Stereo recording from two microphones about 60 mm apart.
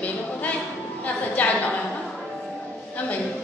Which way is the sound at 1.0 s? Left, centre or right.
Left.